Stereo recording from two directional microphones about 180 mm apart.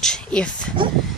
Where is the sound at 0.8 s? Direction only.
25° right (ahead or behind).